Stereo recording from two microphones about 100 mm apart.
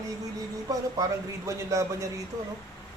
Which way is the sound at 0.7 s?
35° right (ahead or behind).